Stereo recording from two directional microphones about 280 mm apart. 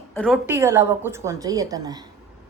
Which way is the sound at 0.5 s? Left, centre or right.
Centre.